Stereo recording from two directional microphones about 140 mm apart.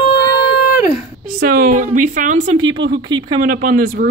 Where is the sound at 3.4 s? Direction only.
90° right.